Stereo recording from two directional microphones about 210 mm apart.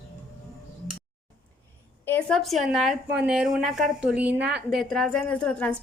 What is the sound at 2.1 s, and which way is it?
A woman's voice, 5° left (ahead or behind).